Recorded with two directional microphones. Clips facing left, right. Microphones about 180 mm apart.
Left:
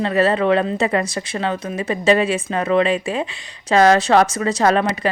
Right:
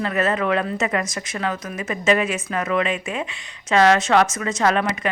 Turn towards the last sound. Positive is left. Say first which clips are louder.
# left 3 dB
turn(degrees=35)  # may be behind; listen again after turning